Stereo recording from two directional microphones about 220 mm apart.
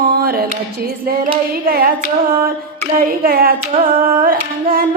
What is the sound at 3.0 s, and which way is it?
Music, 40° right (ahead or behind).